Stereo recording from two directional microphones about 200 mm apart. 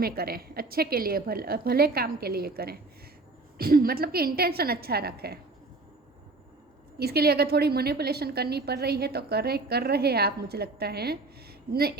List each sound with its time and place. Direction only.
0.0 s a woman's voice: 50° right (ahead or behind)
7.0 s a woman's voice: 50° right (ahead or behind)